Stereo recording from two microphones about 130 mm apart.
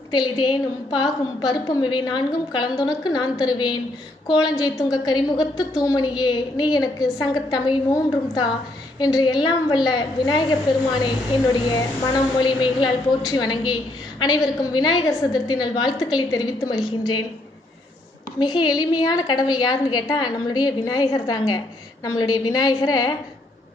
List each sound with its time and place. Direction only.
0.1 s a woman's voice: 35° left (ahead or behind)
9.1 s a woman's voice: 35° left (ahead or behind)
18.3 s a woman's voice: 35° left (ahead or behind)